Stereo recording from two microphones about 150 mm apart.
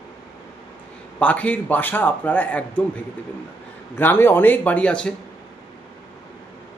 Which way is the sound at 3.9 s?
15° left (ahead or behind).